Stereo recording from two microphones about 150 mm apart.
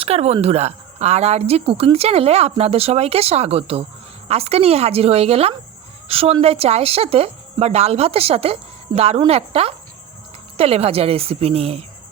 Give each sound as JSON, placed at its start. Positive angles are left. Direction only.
{"t": 0.0, "sound": "a woman's voice", "side_deg": -45}